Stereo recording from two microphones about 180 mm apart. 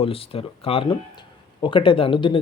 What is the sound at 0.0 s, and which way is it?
Speech, 30° left (ahead or behind).